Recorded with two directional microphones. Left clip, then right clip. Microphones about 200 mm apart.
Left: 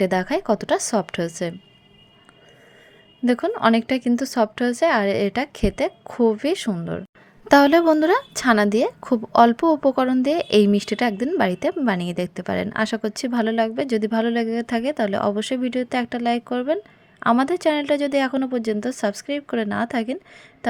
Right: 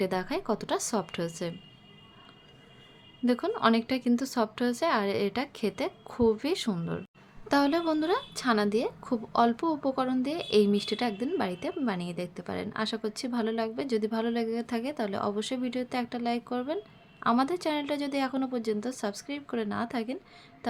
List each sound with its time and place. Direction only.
0.0 s speech: 30° left (ahead or behind)
3.2 s speech: 30° left (ahead or behind)
7.4 s a woman's voice: 40° left (ahead or behind)